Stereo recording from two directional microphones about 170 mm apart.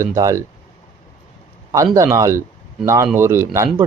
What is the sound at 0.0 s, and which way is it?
Speech, 20° right (ahead or behind).